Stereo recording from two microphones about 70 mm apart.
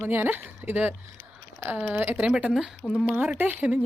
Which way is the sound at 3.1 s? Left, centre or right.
Right.